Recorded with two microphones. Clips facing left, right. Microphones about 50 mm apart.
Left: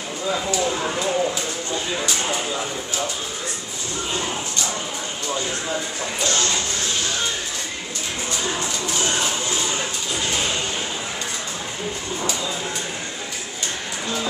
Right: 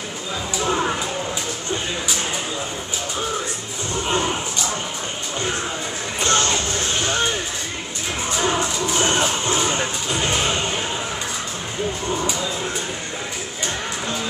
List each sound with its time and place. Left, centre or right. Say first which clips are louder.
0.5 s a sound: right 6 dB; right
6.2 s music: right 4 dB; right
8.4 s music: right 7 dB; right